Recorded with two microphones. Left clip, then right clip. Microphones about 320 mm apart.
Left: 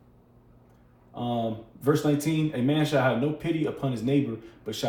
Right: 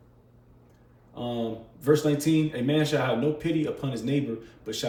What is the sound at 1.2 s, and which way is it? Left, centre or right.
Speech, centre.